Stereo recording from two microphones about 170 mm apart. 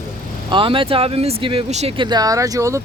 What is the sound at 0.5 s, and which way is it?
Speech, 30° right (ahead or behind).